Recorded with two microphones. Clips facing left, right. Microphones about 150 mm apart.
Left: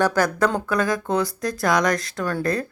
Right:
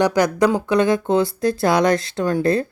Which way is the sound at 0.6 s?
25° right (ahead or behind).